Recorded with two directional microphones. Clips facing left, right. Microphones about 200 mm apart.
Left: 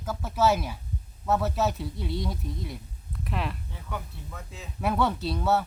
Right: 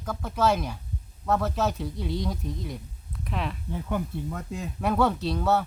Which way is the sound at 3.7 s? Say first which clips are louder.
Right 8 dB; 50° right (ahead or behind).